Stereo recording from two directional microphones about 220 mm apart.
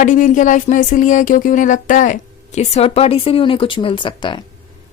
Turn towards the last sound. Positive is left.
turn(degrees=20)  # may be behind; listen again after turning